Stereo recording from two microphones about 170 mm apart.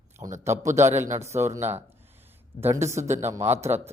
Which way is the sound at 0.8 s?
45° right (ahead or behind).